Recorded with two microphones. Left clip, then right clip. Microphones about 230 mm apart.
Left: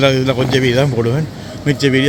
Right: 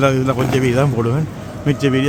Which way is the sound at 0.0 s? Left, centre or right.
Centre.